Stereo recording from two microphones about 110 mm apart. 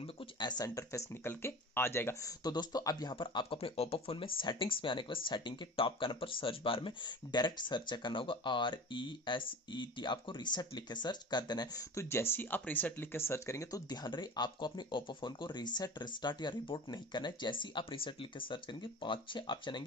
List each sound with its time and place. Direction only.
0.0 s a sound: 50° left (ahead or behind)
0.7 s speech: 25° left (ahead or behind)
2.4 s speech: 40° left (ahead or behind)